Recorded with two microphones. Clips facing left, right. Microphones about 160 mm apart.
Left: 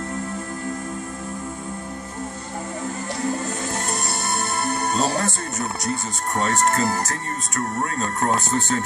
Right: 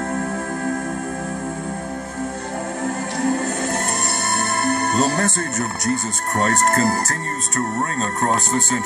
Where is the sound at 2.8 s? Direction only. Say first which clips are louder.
Right 5 dB; 60° right (ahead or behind).